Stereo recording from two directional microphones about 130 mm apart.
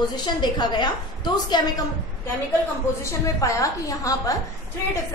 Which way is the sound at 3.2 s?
25° left (ahead or behind).